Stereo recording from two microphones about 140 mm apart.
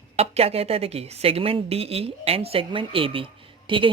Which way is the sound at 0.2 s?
45° right (ahead or behind).